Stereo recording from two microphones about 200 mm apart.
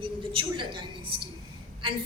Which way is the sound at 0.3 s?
25° right (ahead or behind).